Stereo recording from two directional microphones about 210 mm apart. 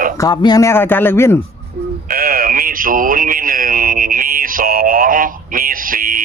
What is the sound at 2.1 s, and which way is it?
Speech, 45° right (ahead or behind).